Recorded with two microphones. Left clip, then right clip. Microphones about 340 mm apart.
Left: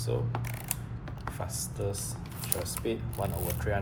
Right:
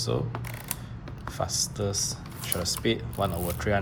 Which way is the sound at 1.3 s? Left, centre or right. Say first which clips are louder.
Right 13 dB; centre.